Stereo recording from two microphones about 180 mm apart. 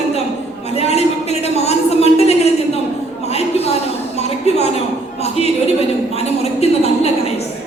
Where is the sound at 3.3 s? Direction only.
35° left (ahead or behind).